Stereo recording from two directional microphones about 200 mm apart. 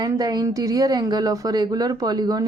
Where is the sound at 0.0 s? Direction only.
20° right (ahead or behind).